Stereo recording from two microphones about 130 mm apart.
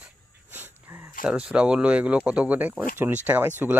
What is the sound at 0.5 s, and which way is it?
Dog, 15° right (ahead or behind).